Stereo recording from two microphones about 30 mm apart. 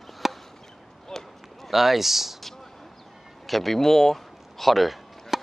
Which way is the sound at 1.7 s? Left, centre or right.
Centre.